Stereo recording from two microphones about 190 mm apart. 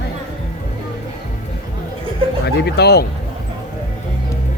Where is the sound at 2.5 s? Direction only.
60° left (ahead or behind).